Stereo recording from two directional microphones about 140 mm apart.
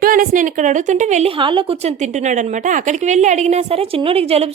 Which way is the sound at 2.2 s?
60° right (ahead or behind).